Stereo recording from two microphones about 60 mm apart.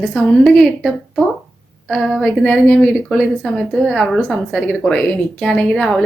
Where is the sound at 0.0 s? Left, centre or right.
Centre.